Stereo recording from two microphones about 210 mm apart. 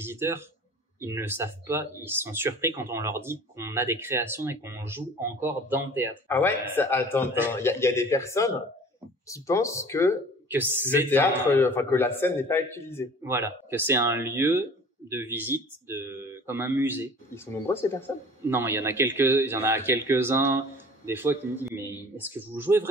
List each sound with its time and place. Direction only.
0.0 s a man's voice: 10° right (ahead or behind)
6.2 s speech: 10° left (ahead or behind)
10.5 s a man's voice: 10° right (ahead or behind)
11.1 s speech: 10° left (ahead or behind)
13.2 s a man's voice: 10° right (ahead or behind)
17.7 s speech: 15° left (ahead or behind)
18.5 s a man's voice: 10° right (ahead or behind)